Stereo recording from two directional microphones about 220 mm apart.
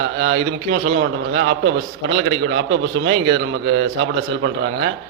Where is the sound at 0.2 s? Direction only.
55° right (ahead or behind).